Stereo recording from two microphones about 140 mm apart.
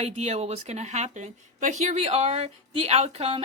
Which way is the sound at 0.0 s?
50° right (ahead or behind).